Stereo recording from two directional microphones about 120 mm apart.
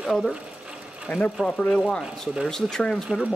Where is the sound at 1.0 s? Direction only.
15° left (ahead or behind).